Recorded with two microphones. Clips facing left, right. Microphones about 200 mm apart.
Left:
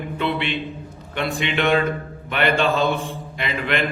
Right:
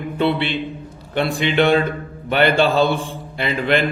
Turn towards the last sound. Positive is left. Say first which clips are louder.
# right 5 dB
turn(degrees=-35)  # may be behind; listen again after turning